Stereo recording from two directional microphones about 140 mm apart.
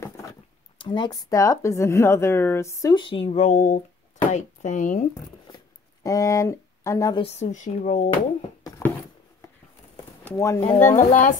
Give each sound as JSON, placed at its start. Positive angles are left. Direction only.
{"t": 0.7, "sound": "speech", "side_deg": 35}
{"t": 1.3, "sound": "a woman's voice", "side_deg": 20}
{"t": 6.0, "sound": "speech", "side_deg": 25}
{"t": 7.3, "sound": "speech", "side_deg": 60}
{"t": 10.3, "sound": "a woman's voice", "side_deg": 20}
{"t": 10.9, "sound": "speech", "side_deg": 65}